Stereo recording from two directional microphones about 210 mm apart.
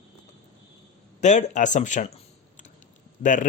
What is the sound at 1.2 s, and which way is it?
Speech, 35° left (ahead or behind).